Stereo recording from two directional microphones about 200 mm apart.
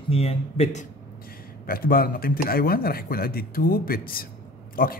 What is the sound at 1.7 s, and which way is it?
A man's voice, 45° left (ahead or behind).